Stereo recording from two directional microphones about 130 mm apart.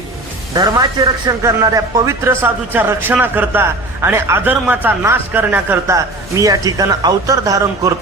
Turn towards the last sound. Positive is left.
turn(degrees=-25)  # may be behind; listen again after turning